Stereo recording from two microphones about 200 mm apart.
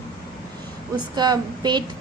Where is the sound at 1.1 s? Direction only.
20° right (ahead or behind).